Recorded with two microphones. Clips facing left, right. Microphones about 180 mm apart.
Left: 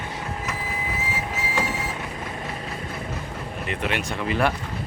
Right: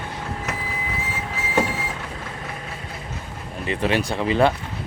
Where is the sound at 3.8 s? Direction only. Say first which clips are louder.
Right 6 dB; 35° right (ahead or behind).